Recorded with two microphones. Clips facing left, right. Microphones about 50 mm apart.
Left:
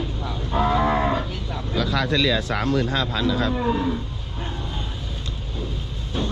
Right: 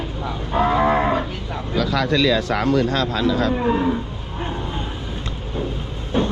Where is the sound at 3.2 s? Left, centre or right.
Right.